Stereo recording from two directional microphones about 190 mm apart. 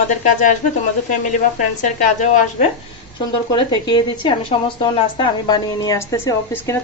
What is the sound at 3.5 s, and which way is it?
A woman's voice, 25° left (ahead or behind).